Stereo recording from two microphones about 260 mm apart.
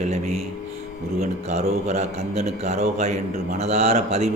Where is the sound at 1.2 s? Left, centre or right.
Right.